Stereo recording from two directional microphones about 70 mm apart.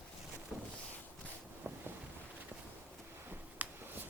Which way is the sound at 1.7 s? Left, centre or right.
Right.